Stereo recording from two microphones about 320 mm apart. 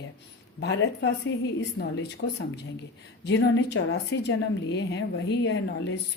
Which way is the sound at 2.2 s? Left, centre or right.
Left.